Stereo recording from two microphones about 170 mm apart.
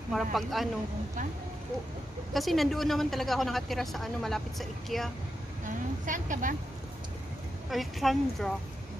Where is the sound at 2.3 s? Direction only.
Centre (ahead or behind).